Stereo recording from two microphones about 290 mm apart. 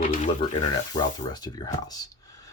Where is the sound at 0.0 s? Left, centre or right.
Left.